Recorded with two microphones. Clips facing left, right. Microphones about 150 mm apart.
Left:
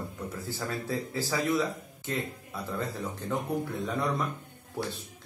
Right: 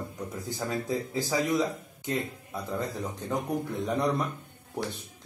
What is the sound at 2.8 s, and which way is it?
Speech, 15° right (ahead or behind).